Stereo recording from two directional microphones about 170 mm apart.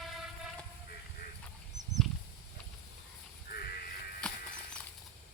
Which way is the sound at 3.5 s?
65° left (ahead or behind).